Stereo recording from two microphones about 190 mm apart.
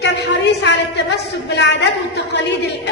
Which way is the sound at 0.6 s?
65° left (ahead or behind).